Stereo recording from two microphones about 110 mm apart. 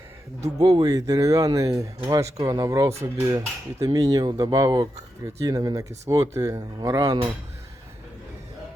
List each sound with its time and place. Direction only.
0.4 s speech: 35° right (ahead or behind)